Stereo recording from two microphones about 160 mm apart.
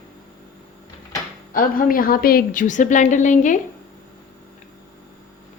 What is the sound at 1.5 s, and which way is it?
A woman's voice, 60° left (ahead or behind).